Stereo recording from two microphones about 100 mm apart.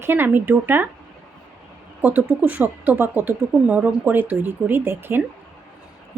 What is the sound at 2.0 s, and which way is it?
Speech, 15° right (ahead or behind).